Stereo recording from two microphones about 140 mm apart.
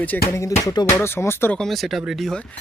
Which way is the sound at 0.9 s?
15° left (ahead or behind).